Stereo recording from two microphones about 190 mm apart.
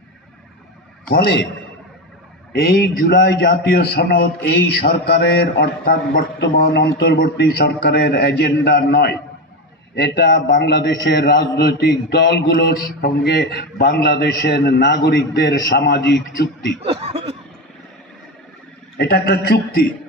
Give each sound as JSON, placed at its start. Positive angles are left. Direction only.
{"t": 1.1, "sound": "a man's voice", "side_deg": 65}
{"t": 2.5, "sound": "a man's voice", "side_deg": 50}
{"t": 10.2, "sound": "a man's voice", "side_deg": 70}
{"t": 16.8, "sound": "speech", "side_deg": -30}
{"t": 18.9, "sound": "a man's voice", "side_deg": 55}